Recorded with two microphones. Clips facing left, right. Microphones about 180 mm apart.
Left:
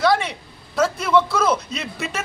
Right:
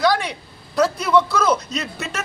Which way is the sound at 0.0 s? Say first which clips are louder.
Even; centre (ahead or behind).